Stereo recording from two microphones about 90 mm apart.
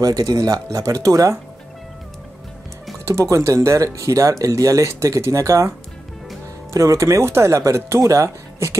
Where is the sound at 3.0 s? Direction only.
35° right (ahead or behind).